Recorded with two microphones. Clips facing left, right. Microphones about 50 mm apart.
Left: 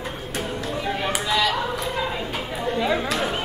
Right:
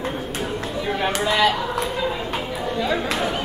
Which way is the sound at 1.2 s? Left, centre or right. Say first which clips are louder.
Right 4 dB; right.